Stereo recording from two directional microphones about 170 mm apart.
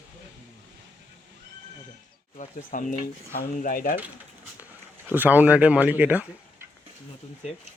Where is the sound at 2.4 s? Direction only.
45° left (ahead or behind).